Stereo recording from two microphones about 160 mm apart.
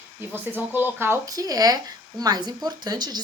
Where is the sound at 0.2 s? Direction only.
10° right (ahead or behind).